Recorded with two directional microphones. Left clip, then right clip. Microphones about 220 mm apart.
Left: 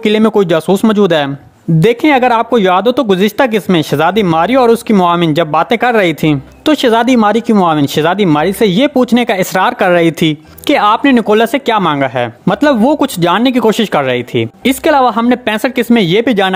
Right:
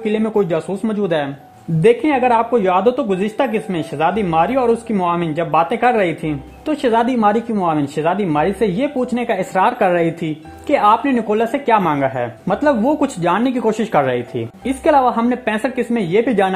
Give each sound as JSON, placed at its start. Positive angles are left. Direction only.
{"t": 0.0, "sound": "a man's voice", "side_deg": 35}